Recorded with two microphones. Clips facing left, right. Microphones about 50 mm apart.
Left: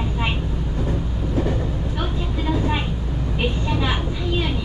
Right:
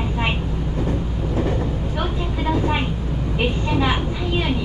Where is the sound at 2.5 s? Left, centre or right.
Centre.